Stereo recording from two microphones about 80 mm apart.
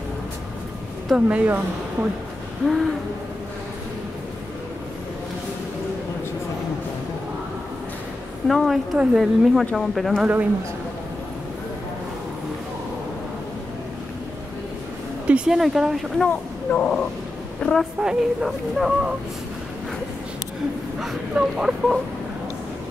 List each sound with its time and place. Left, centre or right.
1.1 s speech: centre
2.6 s speech: centre
8.5 s speech: centre
15.2 s speech: centre
16.3 s a woman's voice: centre
18.0 s speech: centre
21.0 s speech: centre